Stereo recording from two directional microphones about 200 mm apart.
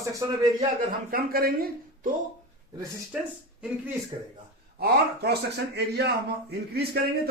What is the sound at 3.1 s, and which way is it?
Speech, 5° right (ahead or behind).